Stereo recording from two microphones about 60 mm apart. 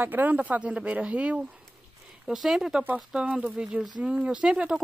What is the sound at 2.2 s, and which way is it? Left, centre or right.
Speech, centre.